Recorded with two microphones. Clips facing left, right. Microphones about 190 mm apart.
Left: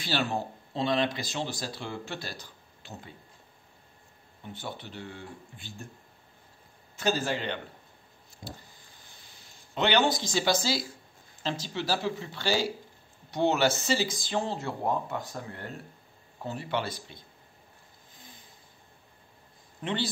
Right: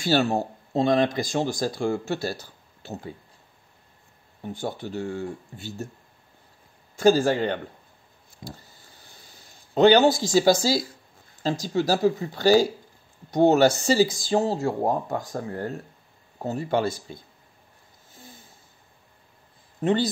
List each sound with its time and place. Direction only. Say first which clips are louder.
0.0 s speech: right 8 dB; 45° right (ahead or behind)
4.4 s speech: right 9 dB; 45° right (ahead or behind)
7.0 s speech: right 10 dB; 45° right (ahead or behind)
9.8 s speech: right 9 dB; 40° right (ahead or behind)
19.8 s speech: right 9 dB; 45° right (ahead or behind)